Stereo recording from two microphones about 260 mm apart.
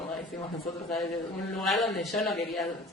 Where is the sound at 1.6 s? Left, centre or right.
Centre.